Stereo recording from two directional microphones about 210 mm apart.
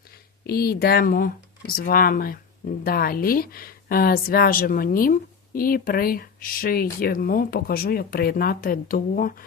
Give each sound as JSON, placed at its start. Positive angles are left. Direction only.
{"t": 0.4, "sound": "speech", "side_deg": 45}